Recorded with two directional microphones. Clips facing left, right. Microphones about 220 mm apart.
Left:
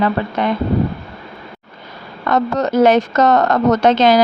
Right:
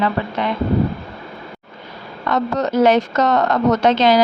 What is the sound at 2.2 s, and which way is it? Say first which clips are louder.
Speech: left 2 dB; 45° left (ahead or behind).